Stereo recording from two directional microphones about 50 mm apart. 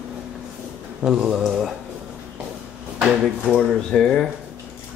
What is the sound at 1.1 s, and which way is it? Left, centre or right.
Speech, right.